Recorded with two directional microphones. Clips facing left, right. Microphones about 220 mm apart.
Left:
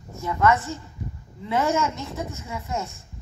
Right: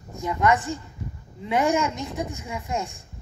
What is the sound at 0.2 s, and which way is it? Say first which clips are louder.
Speech: left 1 dB; 15° right (ahead or behind).